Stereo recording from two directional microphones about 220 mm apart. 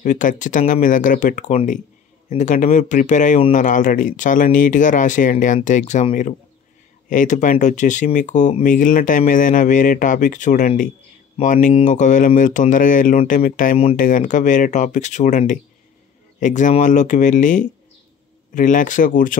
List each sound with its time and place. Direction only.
0.0 s speech: 35° left (ahead or behind)